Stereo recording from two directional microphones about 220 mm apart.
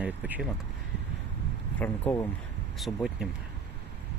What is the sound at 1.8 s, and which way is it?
Speech, 10° left (ahead or behind).